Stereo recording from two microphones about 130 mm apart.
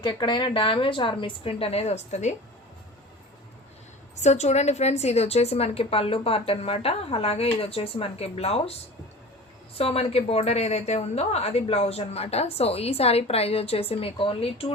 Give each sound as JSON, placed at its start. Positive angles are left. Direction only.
{"t": 0.0, "sound": "a woman's voice", "side_deg": 35}
{"t": 4.1, "sound": "a woman's voice", "side_deg": 60}
{"t": 9.7, "sound": "a woman's voice", "side_deg": 50}